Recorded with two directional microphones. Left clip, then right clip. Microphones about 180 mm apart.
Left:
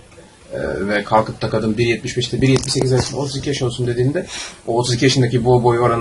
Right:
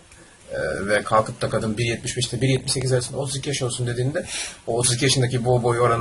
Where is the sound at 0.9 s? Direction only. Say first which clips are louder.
Left 3 dB; 20° right (ahead or behind).